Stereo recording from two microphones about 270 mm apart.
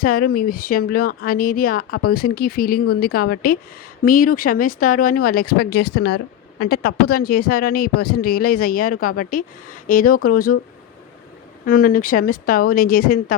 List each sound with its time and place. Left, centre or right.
0.0 s speech: left
11.6 s speech: left